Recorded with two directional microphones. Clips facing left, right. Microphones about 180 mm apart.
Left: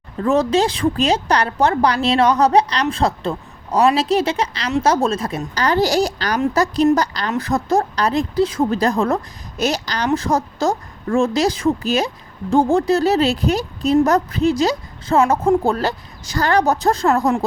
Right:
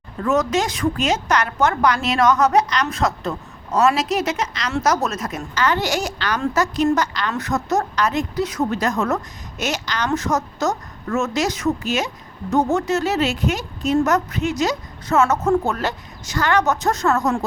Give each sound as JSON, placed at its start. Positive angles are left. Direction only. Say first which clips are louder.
{"t": 0.2, "sound": "a woman's voice", "louder": "left 3 dB", "side_deg": 30}